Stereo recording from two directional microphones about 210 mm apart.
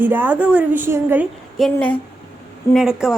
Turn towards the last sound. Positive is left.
turn(degrees=0)  # may be behind; listen again after turning